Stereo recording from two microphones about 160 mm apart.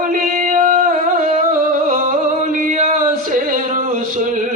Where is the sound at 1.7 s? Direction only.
55° right (ahead or behind).